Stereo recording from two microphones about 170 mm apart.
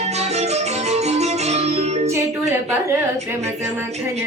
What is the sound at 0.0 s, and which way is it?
Music, 40° right (ahead or behind).